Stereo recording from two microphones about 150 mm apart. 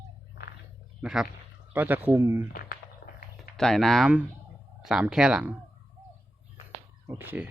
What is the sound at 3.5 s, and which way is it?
Speech, 5° left (ahead or behind).